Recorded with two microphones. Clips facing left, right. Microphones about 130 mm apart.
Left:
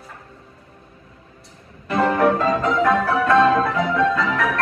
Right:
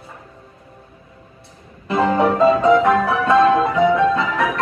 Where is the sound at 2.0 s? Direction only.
20° right (ahead or behind).